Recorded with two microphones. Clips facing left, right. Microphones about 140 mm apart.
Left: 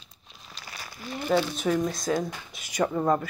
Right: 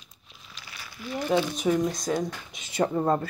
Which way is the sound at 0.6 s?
40° left (ahead or behind).